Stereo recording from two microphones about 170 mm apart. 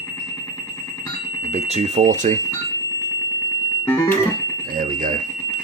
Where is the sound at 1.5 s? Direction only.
40° right (ahead or behind).